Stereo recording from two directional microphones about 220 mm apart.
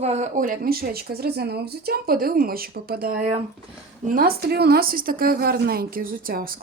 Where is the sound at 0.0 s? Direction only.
30° right (ahead or behind).